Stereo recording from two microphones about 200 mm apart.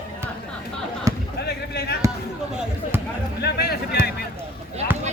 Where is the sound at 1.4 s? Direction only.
55° left (ahead or behind).